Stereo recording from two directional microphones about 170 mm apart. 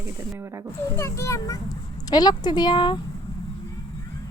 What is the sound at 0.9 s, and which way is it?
A child's voice, 15° left (ahead or behind).